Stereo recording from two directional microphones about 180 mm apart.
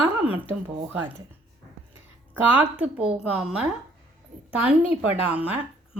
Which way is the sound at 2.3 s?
10° right (ahead or behind).